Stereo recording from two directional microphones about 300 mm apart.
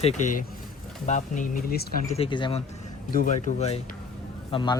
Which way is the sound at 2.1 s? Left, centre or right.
Centre.